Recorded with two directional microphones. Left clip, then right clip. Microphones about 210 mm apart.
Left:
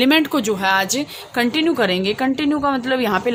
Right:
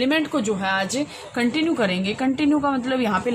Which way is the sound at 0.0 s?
55° left (ahead or behind).